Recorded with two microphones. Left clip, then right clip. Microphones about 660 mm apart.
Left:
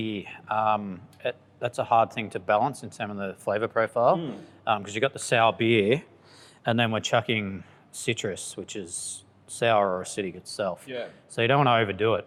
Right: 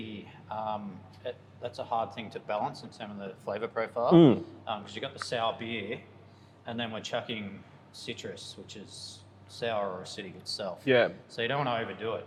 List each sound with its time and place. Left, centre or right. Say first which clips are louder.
0.1 s speech: left 11 dB; left
10.8 s speech: right 11 dB; right
11.3 s speech: left 10 dB; left